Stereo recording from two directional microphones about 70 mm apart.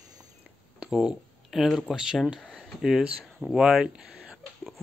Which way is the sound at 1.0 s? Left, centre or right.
Centre.